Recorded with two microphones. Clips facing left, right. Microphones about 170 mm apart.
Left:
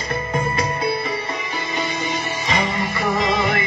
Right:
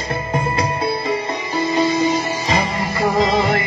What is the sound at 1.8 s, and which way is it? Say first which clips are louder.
Music: right 8 dB; 35° right (ahead or behind).